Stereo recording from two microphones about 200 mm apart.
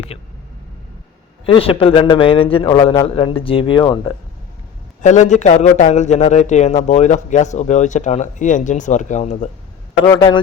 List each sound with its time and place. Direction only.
1.5 s a man's voice: 25° left (ahead or behind)
5.0 s speech: 35° left (ahead or behind)
10.0 s a man's voice: 20° left (ahead or behind)